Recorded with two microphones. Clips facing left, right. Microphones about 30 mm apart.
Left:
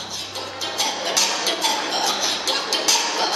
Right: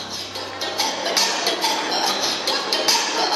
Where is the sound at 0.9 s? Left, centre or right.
Centre.